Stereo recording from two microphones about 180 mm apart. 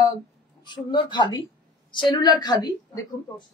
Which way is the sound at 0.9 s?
25° left (ahead or behind).